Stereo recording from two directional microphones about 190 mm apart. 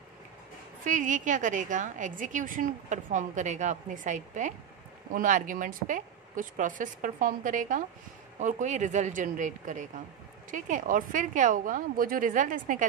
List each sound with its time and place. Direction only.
0.8 s a woman's voice: 45° right (ahead or behind)